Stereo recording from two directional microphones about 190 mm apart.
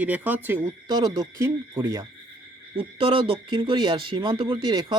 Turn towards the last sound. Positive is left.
turn(degrees=-25)  # may be behind; listen again after turning